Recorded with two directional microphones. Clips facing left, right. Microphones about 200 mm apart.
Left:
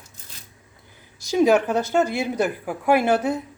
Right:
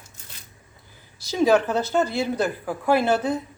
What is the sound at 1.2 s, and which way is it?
A woman's voice, 15° left (ahead or behind).